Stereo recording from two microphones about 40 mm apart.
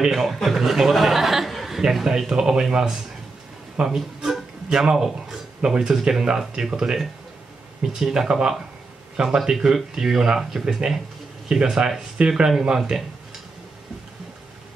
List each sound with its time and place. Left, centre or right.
0.0 s a man's voice: centre
1.8 s speech: centre
4.6 s speech: right
4.9 s speech: centre